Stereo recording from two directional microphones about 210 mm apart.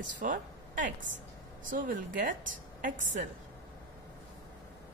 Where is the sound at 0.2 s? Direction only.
40° right (ahead or behind).